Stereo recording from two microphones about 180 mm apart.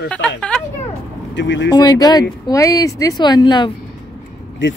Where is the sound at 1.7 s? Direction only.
20° left (ahead or behind).